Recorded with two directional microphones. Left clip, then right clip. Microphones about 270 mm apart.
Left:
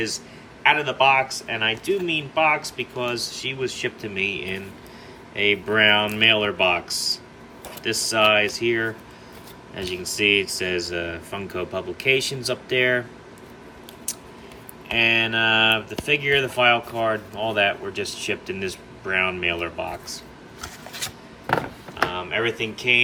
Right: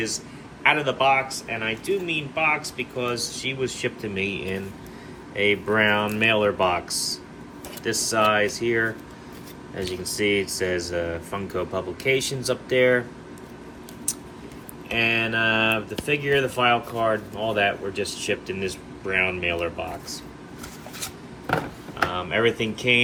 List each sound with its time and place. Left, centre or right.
0.6 s speech: centre
14.8 s speech: centre
21.0 s filing: left
22.1 s speech: centre